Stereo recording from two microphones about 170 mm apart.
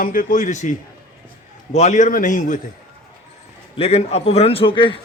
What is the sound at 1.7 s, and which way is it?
Speech, 45° left (ahead or behind).